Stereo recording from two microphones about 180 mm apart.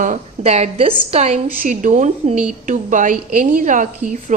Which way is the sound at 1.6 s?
45° right (ahead or behind).